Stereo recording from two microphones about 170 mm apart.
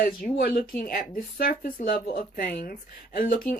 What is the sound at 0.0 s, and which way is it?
Speech, 60° left (ahead or behind).